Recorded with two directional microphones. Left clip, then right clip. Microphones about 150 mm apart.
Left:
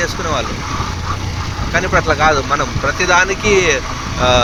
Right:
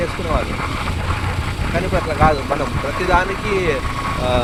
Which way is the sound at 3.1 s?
60° left (ahead or behind).